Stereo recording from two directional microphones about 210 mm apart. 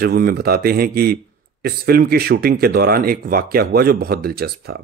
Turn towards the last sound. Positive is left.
turn(degrees=-50)  # may be behind; listen again after turning